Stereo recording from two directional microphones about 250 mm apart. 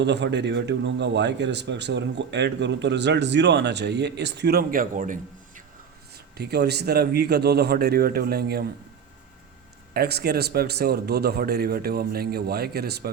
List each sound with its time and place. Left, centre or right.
0.0 s a man's voice: right
9.9 s a man's voice: right